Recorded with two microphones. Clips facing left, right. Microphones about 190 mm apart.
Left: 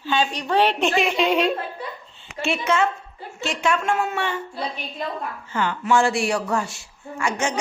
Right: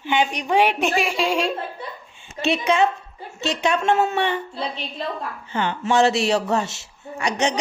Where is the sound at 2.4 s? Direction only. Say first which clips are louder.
Right 2 dB; 20° right (ahead or behind).